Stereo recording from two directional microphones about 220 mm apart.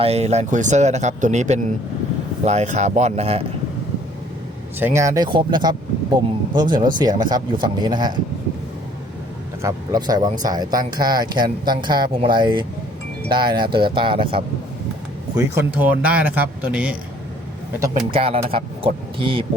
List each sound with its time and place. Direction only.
0.0 s a man's voice: 30° right (ahead or behind)
4.8 s speech: 10° right (ahead or behind)
9.6 s speech: 15° right (ahead or behind)
15.5 s speech: 10° right (ahead or behind)
18.1 s speech: 25° right (ahead or behind)